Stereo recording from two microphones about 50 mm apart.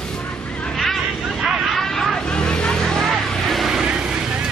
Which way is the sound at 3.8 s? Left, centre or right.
Centre.